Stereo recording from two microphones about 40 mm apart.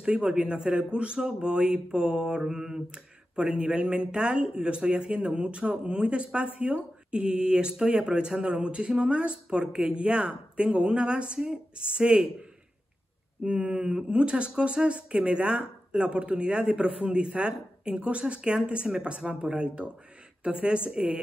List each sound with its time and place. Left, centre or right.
0.0 s speech: right
13.4 s speech: right